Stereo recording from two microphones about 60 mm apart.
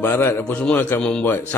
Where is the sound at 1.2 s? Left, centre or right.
Left.